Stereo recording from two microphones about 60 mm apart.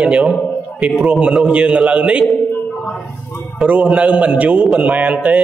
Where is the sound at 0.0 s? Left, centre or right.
Centre.